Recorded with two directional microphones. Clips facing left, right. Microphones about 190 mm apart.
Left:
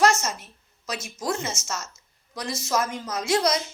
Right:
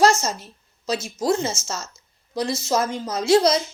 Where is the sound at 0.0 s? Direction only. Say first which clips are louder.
Right 3 dB; 30° right (ahead or behind).